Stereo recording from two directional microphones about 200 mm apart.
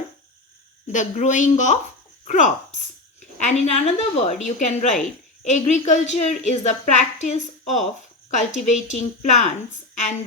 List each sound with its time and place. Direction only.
0.9 s a woman's voice: 35° left (ahead or behind)